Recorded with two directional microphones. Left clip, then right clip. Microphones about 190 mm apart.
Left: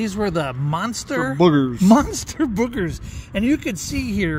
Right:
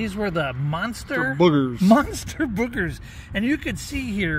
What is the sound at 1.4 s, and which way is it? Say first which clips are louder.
Speech: left 3 dB; 25° left (ahead or behind).